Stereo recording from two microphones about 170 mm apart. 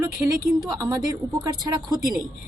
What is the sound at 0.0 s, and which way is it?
Speech, 20° right (ahead or behind).